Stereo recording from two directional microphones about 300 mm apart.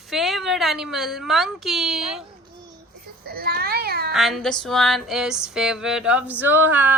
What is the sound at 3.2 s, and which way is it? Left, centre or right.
Babbling, right.